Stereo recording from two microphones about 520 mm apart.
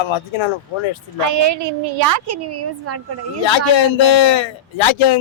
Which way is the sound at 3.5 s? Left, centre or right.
Left.